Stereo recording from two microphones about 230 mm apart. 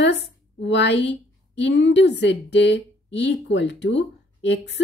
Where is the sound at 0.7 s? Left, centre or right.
Left.